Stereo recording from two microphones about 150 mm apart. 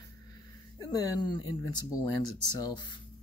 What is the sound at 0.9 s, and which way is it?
Speech, 30° left (ahead or behind).